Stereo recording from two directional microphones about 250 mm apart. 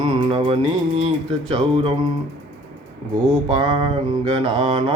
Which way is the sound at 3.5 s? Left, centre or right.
Centre.